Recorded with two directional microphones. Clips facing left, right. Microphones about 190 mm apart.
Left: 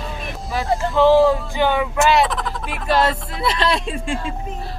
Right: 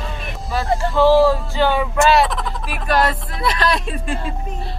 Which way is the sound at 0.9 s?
20° left (ahead or behind).